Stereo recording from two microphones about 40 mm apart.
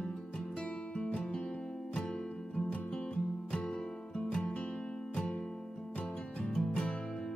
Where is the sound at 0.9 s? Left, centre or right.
Left.